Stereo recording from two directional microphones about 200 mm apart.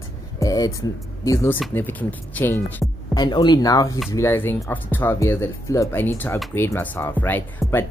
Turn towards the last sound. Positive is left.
turn(degrees=10)  # may be behind; listen again after turning